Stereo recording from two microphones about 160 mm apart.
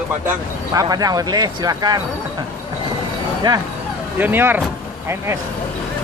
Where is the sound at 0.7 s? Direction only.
20° right (ahead or behind).